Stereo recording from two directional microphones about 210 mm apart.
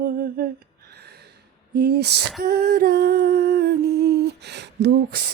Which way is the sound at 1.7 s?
50° right (ahead or behind).